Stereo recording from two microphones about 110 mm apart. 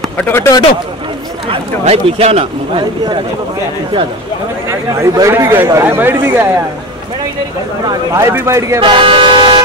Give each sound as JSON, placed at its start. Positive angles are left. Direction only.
{"t": 0.2, "sound": "speech", "side_deg": 25}
{"t": 1.5, "sound": "speech", "side_deg": -70}
{"t": 4.6, "sound": "speech", "side_deg": -25}
{"t": 8.1, "sound": "speech", "side_deg": -25}
{"t": 8.8, "sound": "speech", "side_deg": -50}